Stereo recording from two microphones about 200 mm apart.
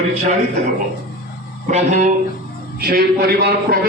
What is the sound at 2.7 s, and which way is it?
A man's voice, 50° right (ahead or behind).